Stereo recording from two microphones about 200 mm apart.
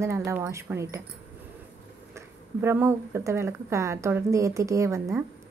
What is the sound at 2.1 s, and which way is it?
A woman's voice, 10° right (ahead or behind).